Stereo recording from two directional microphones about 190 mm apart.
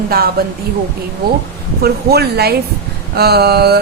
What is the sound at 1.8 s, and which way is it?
A woman's voice, 55° right (ahead or behind).